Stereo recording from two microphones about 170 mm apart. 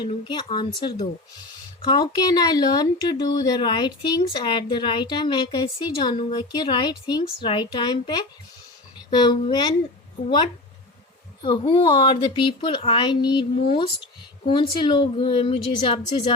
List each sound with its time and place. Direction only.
0.0 s speech: 25° left (ahead or behind)